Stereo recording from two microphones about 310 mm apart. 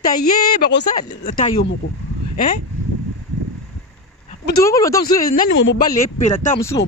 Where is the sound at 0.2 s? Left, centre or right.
Left.